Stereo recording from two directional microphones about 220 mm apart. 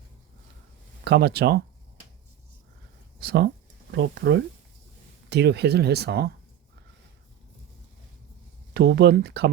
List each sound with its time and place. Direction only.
1.0 s speech: 45° right (ahead or behind)
3.2 s speech: 45° right (ahead or behind)
8.7 s speech: 45° right (ahead or behind)